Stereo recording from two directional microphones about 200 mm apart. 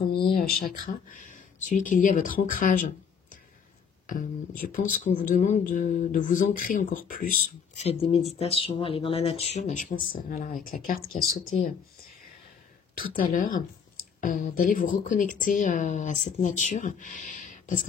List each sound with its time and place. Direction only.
0.3 s speech: 50° left (ahead or behind)
13.2 s speech: 40° left (ahead or behind)